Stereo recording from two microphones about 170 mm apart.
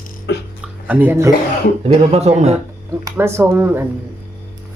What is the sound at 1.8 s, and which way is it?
Speech, 35° right (ahead or behind).